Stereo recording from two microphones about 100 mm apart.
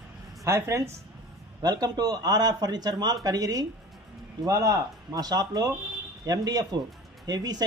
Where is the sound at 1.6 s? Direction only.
45° right (ahead or behind).